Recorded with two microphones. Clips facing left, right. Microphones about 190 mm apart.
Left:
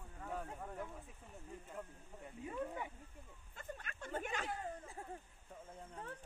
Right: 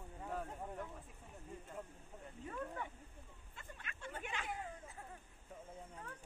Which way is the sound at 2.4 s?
15° left (ahead or behind).